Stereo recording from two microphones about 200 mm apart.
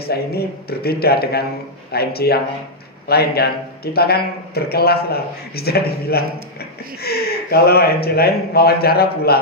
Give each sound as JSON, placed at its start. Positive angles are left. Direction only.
{"t": 0.0, "sound": "a man's voice", "side_deg": 50}